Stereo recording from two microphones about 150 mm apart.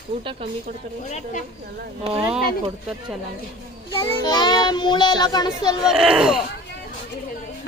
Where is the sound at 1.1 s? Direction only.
55° left (ahead or behind).